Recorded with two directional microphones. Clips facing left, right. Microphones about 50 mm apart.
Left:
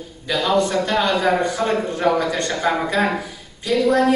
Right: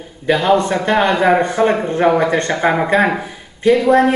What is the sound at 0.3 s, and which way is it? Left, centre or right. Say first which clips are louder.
Speech: right 5 dB; right.